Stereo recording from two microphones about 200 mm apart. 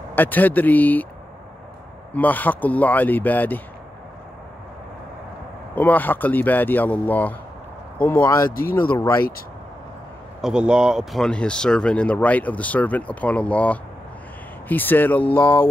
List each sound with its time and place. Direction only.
0.1 s speech: 10° left (ahead or behind)
2.1 s speech: 10° left (ahead or behind)
5.8 s speech: 10° left (ahead or behind)
8.5 s speech: 45° left (ahead or behind)
8.9 s speech: 10° left (ahead or behind)
10.4 s speech: 5° right (ahead or behind)